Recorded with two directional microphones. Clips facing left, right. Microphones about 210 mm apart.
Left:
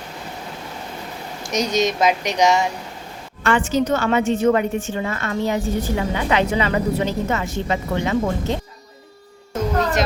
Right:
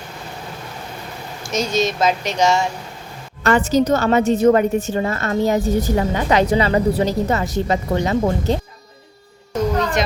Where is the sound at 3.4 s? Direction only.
40° right (ahead or behind).